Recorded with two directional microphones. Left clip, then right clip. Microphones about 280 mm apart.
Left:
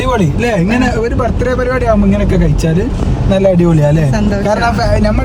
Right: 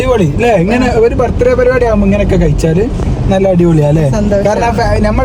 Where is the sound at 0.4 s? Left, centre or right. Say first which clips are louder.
Right 5 dB; centre.